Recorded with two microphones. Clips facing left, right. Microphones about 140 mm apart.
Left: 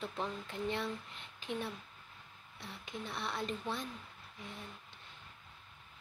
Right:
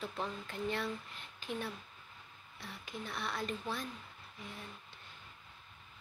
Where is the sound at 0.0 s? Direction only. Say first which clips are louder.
Left 1 dB; centre (ahead or behind).